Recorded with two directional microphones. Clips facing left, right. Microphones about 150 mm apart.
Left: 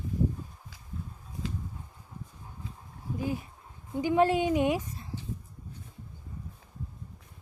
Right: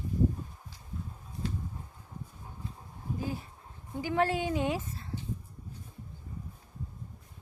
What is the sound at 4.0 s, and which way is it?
Speech, 20° left (ahead or behind).